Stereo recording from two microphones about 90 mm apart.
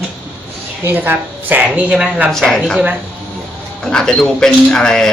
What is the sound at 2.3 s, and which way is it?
Speech, 5° left (ahead or behind).